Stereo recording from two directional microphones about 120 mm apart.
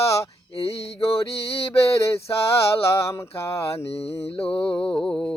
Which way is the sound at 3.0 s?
20° left (ahead or behind).